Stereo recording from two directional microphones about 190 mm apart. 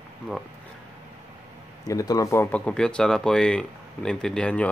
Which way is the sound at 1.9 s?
15° left (ahead or behind).